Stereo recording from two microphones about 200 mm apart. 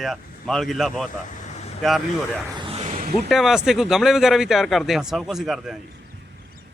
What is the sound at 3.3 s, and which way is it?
Speech, centre (ahead or behind).